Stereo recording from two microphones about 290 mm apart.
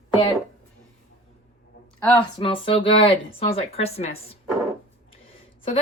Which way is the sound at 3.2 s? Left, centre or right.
Centre.